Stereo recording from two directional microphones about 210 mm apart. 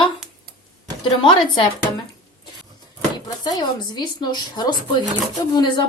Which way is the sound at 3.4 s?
20° left (ahead or behind).